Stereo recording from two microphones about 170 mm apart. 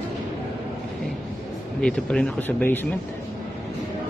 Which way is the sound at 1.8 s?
5° left (ahead or behind).